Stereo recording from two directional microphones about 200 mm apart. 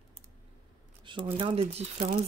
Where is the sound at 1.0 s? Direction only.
25° right (ahead or behind).